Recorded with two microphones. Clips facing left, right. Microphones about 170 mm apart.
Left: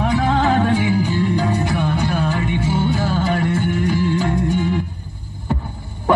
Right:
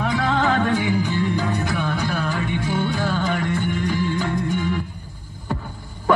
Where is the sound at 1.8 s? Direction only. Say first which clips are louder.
Left 4 dB; 15° left (ahead or behind).